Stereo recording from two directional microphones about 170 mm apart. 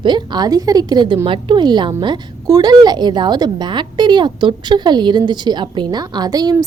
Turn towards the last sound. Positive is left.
turn(degrees=-25)  # may be behind; listen again after turning